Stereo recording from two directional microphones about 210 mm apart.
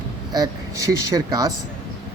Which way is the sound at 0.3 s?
15° right (ahead or behind).